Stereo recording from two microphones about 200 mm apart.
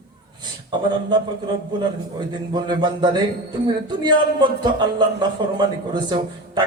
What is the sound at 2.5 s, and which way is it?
A man's voice, 20° right (ahead or behind).